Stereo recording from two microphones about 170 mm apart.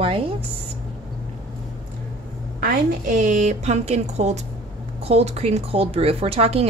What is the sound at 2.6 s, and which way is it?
A woman's voice, 55° right (ahead or behind).